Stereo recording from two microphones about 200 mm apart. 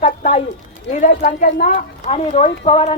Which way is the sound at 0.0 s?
40° left (ahead or behind).